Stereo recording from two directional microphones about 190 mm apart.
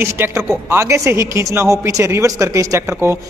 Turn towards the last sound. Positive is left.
turn(degrees=-15)  # may be behind; listen again after turning